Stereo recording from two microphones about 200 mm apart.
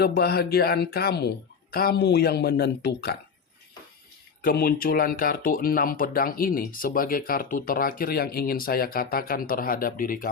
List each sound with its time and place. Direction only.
0.0 s speech: 55° left (ahead or behind)
4.4 s speech: 45° left (ahead or behind)